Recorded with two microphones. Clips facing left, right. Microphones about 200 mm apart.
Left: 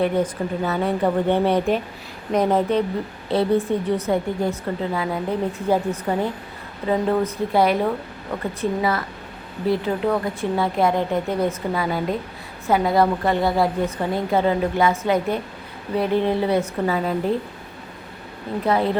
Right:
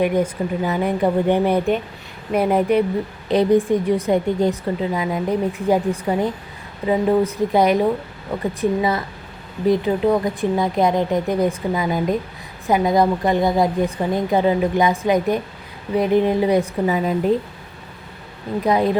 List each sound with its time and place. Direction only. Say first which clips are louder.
0.0 s a woman's voice: right 2 dB; 10° right (ahead or behind)
6.8 s a woman's voice: right 3 dB; 15° right (ahead or behind)
18.6 s a woman's voice: right 2 dB; 15° right (ahead or behind)